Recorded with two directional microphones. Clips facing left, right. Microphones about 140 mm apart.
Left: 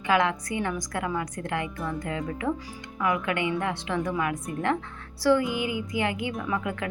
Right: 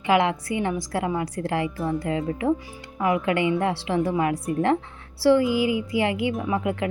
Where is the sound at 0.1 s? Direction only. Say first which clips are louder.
Right 3 dB; 25° right (ahead or behind).